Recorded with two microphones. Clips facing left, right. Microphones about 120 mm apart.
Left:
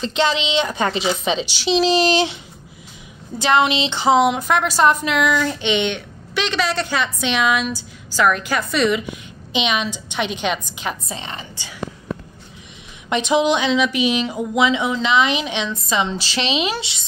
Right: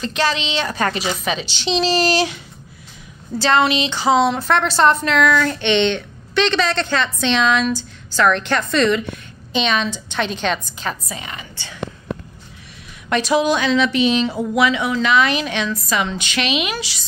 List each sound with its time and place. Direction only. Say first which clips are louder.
0.0 s a woman's voice: left 1 dB; 20° left (ahead or behind)
3.3 s a woman's voice: right 1 dB; 20° left (ahead or behind)
11.1 s speech: left 1 dB; 30° left (ahead or behind)
13.1 s speech: even; 20° left (ahead or behind)